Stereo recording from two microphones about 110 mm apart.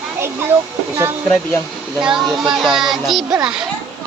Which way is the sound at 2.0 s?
5° right (ahead or behind).